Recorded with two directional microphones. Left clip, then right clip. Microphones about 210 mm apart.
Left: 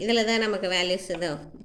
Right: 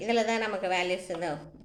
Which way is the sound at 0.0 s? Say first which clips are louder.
Left 4 dB; 45° left (ahead or behind).